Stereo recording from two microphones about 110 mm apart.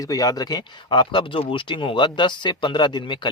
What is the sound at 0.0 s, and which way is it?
Speech, 35° left (ahead or behind).